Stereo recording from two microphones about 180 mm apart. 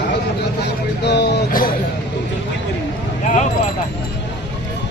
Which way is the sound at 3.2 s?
40° left (ahead or behind).